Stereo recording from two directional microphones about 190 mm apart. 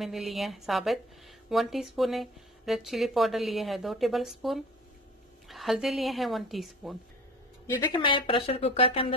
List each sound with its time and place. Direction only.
0.0 s speech: centre (ahead or behind)
7.6 s speech: 25° left (ahead or behind)